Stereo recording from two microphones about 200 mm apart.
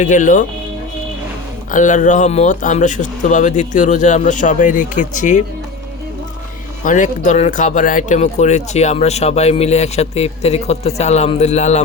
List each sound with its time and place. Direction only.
0.0 s speech: 40° left (ahead or behind)
1.7 s speech: 40° left (ahead or behind)
6.8 s speech: 40° left (ahead or behind)